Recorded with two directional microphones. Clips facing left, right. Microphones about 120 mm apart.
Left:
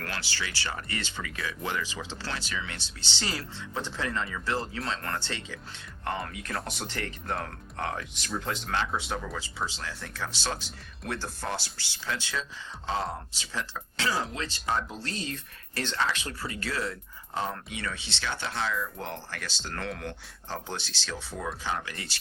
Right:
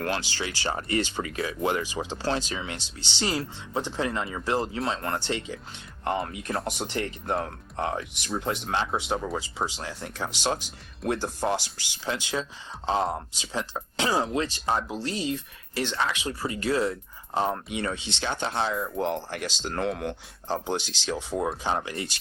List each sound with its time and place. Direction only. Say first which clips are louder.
0.0 s speech: right 7 dB; 20° right (ahead or behind)
9.6 s speech: right 4 dB; 15° right (ahead or behind)
11.1 s speech: right 7 dB; 15° right (ahead or behind)